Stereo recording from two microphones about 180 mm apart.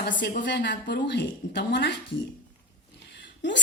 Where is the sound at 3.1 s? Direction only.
80° left.